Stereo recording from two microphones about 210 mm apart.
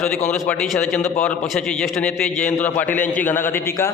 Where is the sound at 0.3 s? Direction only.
5° left (ahead or behind).